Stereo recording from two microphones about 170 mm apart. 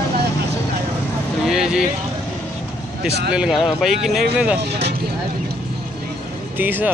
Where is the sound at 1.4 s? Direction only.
Centre (ahead or behind).